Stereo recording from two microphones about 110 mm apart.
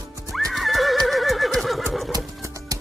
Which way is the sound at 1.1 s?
Centre (ahead or behind).